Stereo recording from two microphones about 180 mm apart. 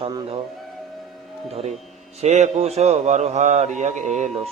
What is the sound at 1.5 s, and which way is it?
Speech, 35° right (ahead or behind).